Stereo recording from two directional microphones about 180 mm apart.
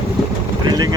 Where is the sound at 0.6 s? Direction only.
20° right (ahead or behind).